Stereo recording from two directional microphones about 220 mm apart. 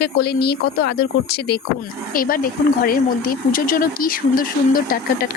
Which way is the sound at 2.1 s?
40° left (ahead or behind).